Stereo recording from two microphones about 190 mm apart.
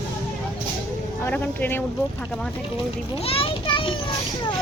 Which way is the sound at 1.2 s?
10° left (ahead or behind).